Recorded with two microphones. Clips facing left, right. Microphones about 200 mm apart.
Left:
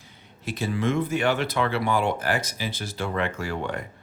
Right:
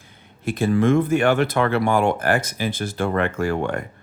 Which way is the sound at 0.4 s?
50° right (ahead or behind).